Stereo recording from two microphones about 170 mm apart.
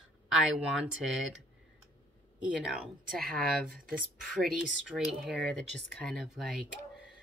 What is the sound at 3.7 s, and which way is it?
Speech, 55° right (ahead or behind).